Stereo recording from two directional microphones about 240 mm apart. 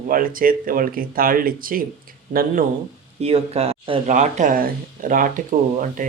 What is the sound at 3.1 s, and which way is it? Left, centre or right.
Speech, right.